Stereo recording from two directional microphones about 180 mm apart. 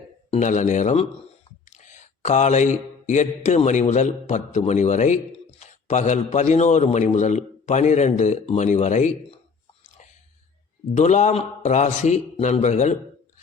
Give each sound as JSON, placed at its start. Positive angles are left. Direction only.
{"t": 0.3, "sound": "speech", "side_deg": 40}
{"t": 10.9, "sound": "speech", "side_deg": 40}